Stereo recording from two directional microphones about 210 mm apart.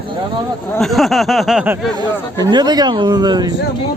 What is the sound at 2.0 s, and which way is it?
Speech, 20° right (ahead or behind).